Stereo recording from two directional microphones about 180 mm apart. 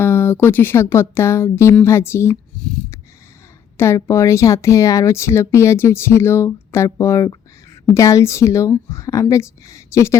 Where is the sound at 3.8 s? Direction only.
15° left (ahead or behind).